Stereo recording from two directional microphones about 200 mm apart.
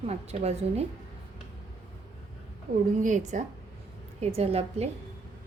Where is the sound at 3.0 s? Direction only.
35° right (ahead or behind).